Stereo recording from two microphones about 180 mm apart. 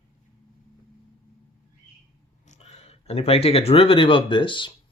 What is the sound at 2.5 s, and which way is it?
Speech, 35° left (ahead or behind).